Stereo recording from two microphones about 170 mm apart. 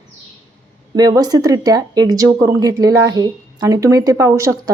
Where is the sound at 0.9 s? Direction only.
20° right (ahead or behind).